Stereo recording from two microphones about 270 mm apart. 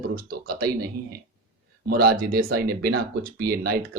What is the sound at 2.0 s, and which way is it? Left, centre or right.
Speech, right.